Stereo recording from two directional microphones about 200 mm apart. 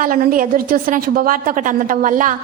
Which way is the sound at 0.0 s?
45° right (ahead or behind).